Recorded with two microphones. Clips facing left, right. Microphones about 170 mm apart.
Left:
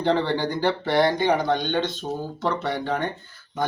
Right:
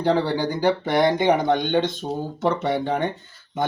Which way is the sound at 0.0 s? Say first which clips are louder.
Right 1 dB; 10° right (ahead or behind).